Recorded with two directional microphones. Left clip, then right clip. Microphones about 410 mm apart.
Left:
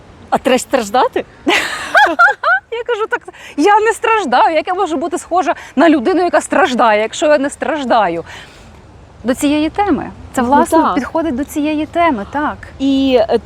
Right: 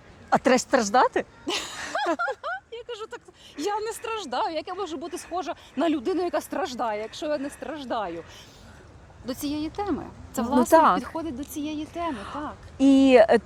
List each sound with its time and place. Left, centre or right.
0.3 s speech: right
1.5 s a sound: left
2.2 s speech: left
10.7 s speech: right
11.0 s speech: left
12.8 s speech: right